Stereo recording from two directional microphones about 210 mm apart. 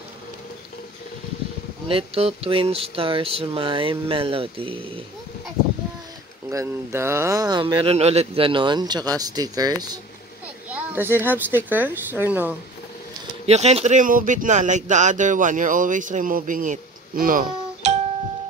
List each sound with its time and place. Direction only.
1.9 s speech: 25° right (ahead or behind)
6.5 s speech: 15° right (ahead or behind)
13.5 s speech: 30° right (ahead or behind)